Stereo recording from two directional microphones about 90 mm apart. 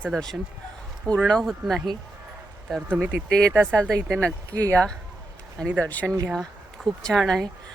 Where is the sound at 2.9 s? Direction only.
15° right (ahead or behind).